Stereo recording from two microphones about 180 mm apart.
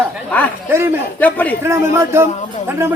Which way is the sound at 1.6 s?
15° right (ahead or behind).